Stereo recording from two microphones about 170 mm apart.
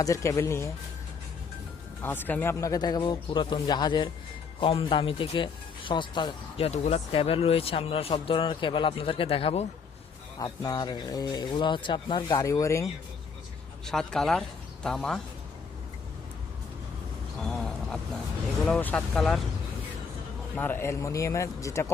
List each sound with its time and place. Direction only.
0.0 s speech: 20° left (ahead or behind)
2.0 s speech: 10° left (ahead or behind); by 9.6 s 35° left (ahead or behind)
10.3 s speech: 25° left (ahead or behind)
13.8 s speech: centre (ahead or behind)
17.4 s a sound: centre (ahead or behind)
18.6 s speech: 5° left (ahead or behind)
20.6 s speech: 10° left (ahead or behind)